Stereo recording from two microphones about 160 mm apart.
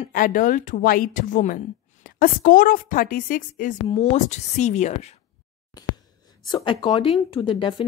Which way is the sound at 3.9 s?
45° left (ahead or behind).